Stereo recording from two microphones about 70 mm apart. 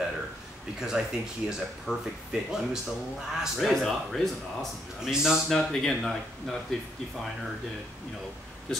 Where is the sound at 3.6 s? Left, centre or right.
Centre.